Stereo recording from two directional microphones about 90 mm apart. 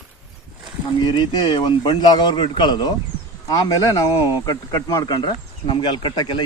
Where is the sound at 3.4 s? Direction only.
45° left (ahead or behind).